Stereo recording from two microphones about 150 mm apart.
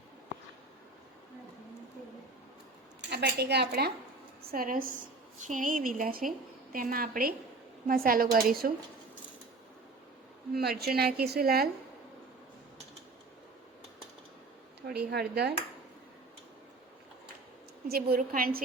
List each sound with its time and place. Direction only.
3.1 s a woman's voice: 90° right
4.4 s a woman's voice: 75° right (ahead or behind)
10.5 s a woman's voice: 90° right
14.8 s speech: 90° right
17.8 s a woman's voice: 90° right